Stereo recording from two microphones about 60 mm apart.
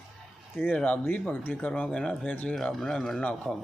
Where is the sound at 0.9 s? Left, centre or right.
Left.